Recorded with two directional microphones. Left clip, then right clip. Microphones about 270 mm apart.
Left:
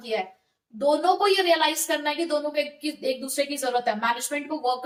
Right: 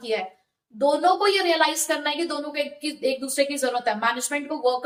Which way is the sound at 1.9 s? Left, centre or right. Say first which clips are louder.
Even; centre.